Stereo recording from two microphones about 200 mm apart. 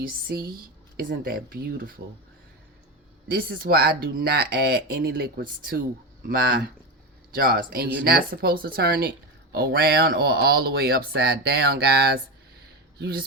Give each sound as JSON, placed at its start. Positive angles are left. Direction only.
{"t": 0.0, "sound": "speech", "side_deg": -50}
{"t": 3.2, "sound": "speech", "side_deg": -50}